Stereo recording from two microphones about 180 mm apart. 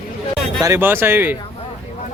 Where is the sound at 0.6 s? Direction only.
15° right (ahead or behind).